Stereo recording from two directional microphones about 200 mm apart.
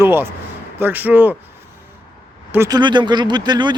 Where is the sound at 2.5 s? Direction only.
15° right (ahead or behind).